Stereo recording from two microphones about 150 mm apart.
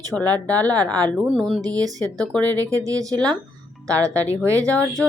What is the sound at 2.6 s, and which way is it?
Speech, 20° right (ahead or behind).